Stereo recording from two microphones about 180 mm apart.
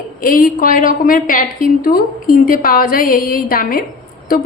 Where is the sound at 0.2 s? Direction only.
50° left (ahead or behind).